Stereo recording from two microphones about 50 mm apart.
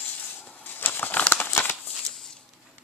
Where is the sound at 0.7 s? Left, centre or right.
Left.